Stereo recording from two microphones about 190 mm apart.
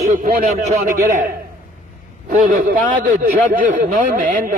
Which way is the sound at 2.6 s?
45° right (ahead or behind).